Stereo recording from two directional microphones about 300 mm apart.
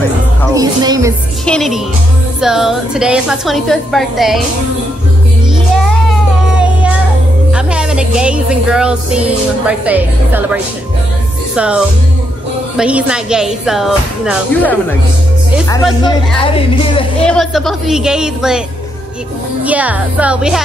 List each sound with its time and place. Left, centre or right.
0.5 s speech: centre
1.4 s speech: centre
6.0 s child singing: centre
7.5 s speech: centre
11.5 s music: centre
12.7 s speech: centre
15.7 s speech: centre
17.3 s speech: centre
19.6 s speech: centre